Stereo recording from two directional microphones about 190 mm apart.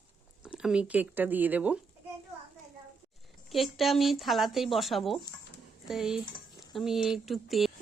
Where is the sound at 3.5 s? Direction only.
Centre (ahead or behind).